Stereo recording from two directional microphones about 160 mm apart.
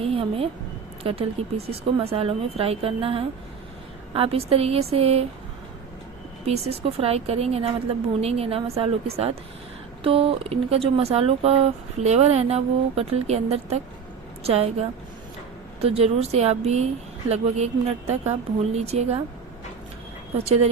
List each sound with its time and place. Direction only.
0.0 s speech: 35° right (ahead or behind)
6.4 s speech: 40° right (ahead or behind)
15.8 s speech: 40° right (ahead or behind)
20.4 s speech: 40° right (ahead or behind)